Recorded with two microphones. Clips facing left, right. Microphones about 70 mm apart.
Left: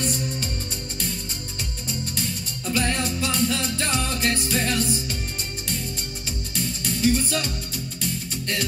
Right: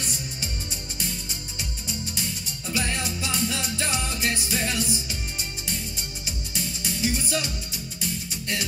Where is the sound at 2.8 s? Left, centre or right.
Left.